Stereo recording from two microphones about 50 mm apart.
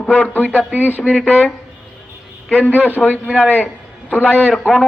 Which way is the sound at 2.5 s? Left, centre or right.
Left.